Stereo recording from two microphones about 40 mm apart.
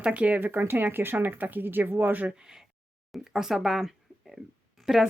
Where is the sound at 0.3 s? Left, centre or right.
Right.